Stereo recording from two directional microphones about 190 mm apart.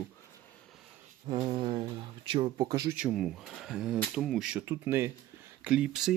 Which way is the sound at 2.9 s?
5° right (ahead or behind).